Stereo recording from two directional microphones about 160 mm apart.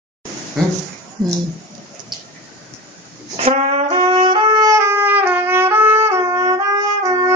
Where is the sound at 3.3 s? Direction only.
40° right (ahead or behind).